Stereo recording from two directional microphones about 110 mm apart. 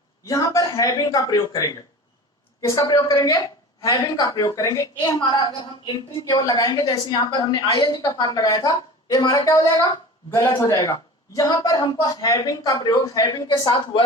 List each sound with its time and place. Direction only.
0.3 s a woman's voice: 30° left (ahead or behind)
2.8 s a woman's voice: 35° left (ahead or behind)
13.7 s a woman's voice: 45° left (ahead or behind)